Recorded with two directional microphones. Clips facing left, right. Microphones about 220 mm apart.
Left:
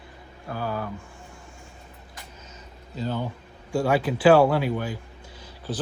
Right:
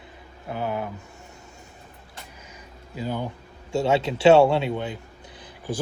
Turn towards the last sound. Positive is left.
turn(degrees=-15)  # may be behind; listen again after turning